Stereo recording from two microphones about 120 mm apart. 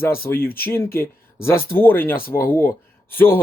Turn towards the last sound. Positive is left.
turn(degrees=20)  # may be behind; listen again after turning